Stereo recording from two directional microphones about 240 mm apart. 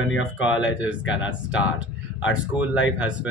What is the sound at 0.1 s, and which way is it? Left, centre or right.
Speech, centre.